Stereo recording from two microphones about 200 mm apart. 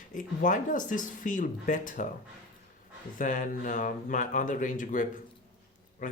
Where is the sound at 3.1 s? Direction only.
40° left (ahead or behind).